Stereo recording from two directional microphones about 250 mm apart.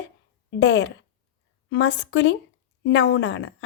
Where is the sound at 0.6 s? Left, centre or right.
Left.